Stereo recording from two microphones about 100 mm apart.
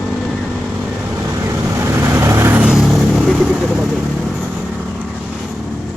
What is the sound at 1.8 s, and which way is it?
Vehicle, 25° right (ahead or behind).